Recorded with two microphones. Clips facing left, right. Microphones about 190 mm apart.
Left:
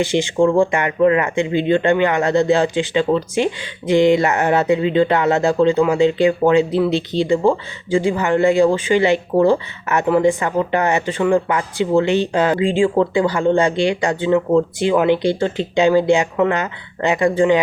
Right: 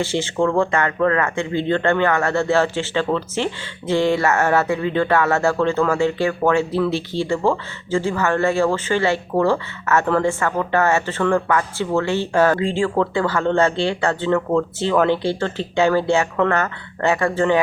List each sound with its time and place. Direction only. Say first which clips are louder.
0.0 s speech: left 4 dB; 15° left (ahead or behind)